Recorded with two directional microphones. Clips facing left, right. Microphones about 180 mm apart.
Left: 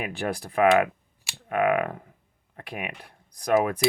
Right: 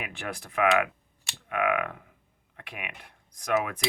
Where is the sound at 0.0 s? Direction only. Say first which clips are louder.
Left 7 dB; 35° left (ahead or behind).